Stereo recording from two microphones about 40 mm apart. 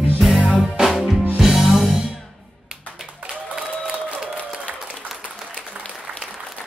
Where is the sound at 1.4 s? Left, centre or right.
Centre.